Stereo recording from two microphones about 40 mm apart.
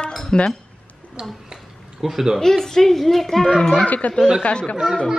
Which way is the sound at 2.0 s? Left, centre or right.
Centre.